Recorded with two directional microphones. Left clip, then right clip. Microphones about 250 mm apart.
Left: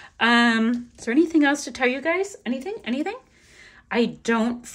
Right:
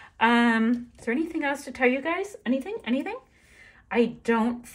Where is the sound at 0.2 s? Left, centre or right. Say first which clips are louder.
Left 3 dB; centre.